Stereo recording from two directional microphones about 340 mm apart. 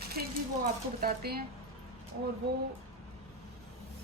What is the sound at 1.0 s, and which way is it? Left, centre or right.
Speech, right.